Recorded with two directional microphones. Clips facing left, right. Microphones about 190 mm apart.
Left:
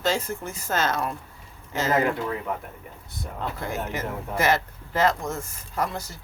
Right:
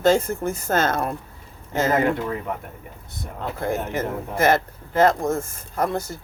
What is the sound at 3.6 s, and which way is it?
Speech, 50° right (ahead or behind).